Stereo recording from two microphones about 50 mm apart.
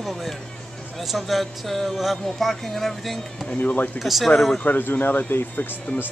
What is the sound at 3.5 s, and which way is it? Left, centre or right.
Speech, left.